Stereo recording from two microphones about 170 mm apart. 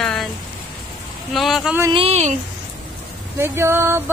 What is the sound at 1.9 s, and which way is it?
Speech, 40° right (ahead or behind).